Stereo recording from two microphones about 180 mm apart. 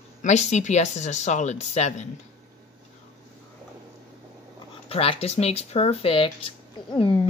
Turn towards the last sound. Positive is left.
turn(degrees=30)  # may be behind; listen again after turning